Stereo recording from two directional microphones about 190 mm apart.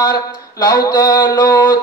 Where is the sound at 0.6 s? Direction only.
20° left (ahead or behind).